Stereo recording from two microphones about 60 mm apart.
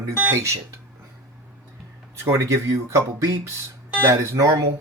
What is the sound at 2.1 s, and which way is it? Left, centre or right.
Speech, right.